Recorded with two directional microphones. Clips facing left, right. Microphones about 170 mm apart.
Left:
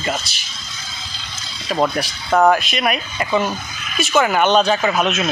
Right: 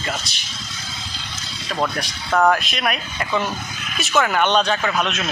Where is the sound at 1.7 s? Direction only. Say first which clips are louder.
Left 5 dB; 20° left (ahead or behind).